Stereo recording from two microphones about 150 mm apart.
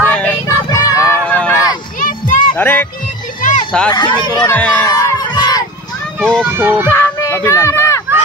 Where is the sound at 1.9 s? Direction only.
60° left (ahead or behind).